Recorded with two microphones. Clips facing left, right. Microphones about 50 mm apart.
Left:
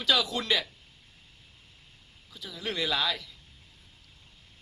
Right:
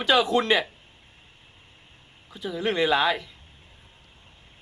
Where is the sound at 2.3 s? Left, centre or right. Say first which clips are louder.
Right 9 dB; right.